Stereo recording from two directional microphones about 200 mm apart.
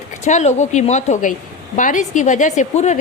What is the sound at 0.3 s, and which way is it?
A woman's voice, 35° left (ahead or behind).